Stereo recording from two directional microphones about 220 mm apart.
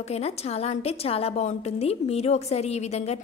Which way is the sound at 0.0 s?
30° left (ahead or behind).